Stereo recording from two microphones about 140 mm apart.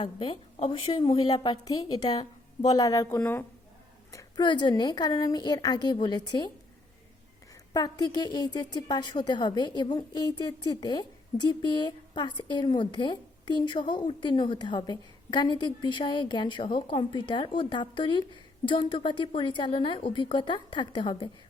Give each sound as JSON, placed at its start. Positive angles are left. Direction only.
{"t": 0.0, "sound": "a woman's voice", "side_deg": 35}
{"t": 7.7, "sound": "a woman's voice", "side_deg": 30}